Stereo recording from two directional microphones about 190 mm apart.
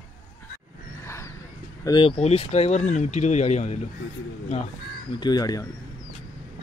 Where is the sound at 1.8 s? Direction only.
25° left (ahead or behind).